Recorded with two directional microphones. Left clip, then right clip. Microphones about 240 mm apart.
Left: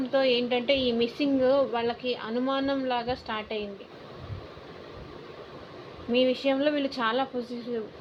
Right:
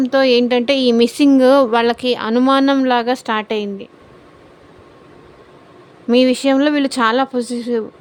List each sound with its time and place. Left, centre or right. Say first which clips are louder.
0.1 s speech: right 10 dB; right
6.1 s speech: right 11 dB; right